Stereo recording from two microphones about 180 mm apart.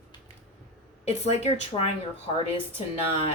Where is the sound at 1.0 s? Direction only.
35° left (ahead or behind).